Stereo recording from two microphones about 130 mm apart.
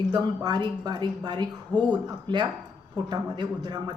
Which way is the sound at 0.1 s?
30° right (ahead or behind).